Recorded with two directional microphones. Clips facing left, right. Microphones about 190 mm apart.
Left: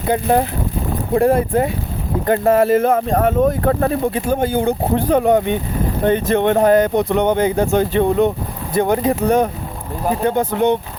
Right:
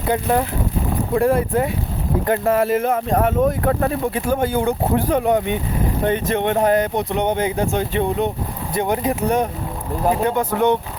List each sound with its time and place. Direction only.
0.1 s speech: 30° left (ahead or behind)
4.1 s speech: 20° left (ahead or behind)